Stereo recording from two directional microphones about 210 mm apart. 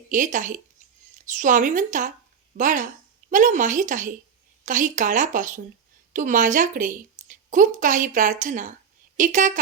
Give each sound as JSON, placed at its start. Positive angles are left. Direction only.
{"t": 0.1, "sound": "a woman's voice", "side_deg": -35}